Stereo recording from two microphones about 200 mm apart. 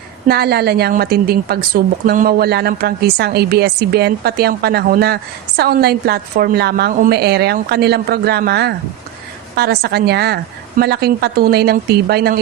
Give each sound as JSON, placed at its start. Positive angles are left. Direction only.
{"t": 0.3, "sound": "a woman's voice", "side_deg": -55}